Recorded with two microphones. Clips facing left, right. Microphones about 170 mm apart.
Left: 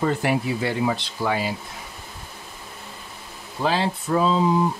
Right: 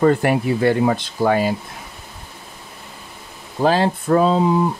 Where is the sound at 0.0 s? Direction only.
55° right (ahead or behind).